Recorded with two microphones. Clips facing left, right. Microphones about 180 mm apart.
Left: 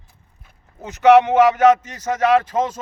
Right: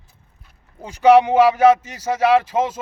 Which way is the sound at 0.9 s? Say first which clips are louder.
Even; 10° right (ahead or behind).